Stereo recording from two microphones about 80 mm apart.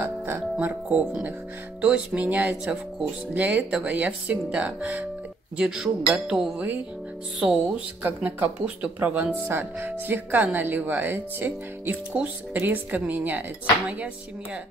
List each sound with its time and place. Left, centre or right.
0.0 s music: right
0.8 s speech: centre
8.0 s speech: right